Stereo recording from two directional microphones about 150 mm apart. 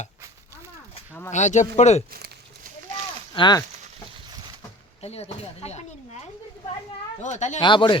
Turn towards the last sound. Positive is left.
turn(degrees=30)  # may be behind; listen again after turning